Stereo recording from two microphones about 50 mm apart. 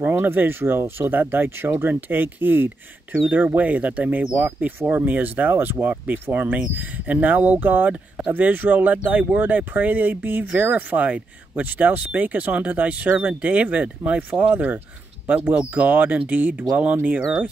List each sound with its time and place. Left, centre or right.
0.1 s speech: right